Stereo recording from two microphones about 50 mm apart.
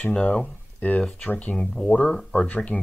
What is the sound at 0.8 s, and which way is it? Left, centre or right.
Speech, left.